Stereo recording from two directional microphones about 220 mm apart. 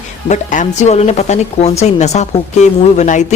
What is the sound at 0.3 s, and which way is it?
A woman's voice, 35° left (ahead or behind).